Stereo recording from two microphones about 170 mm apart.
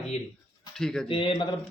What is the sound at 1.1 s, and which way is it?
Speech, 30° left (ahead or behind).